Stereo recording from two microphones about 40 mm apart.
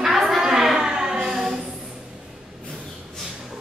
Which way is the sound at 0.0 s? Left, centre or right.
Centre.